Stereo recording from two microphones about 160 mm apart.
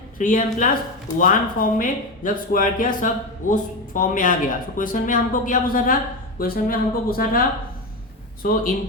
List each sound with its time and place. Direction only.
0.2 s speech: 55° left (ahead or behind)